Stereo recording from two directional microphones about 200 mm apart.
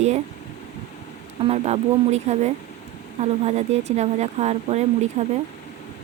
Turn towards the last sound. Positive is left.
turn(degrees=-35)  # may be behind; listen again after turning